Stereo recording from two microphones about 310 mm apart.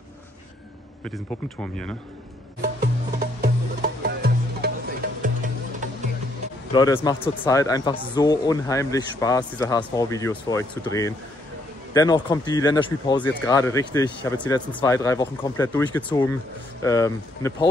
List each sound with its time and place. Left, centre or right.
1.0 s speech: centre
2.6 s music: right
6.7 s speech: centre